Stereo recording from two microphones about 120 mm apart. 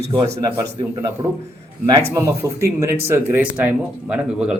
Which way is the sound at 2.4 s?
25° right (ahead or behind).